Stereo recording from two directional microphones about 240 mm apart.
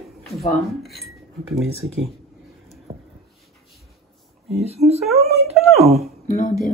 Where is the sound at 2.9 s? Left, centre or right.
Right.